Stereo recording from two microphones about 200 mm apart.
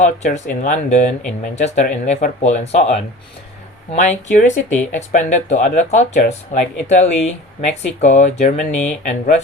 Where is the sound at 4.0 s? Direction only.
35° left (ahead or behind).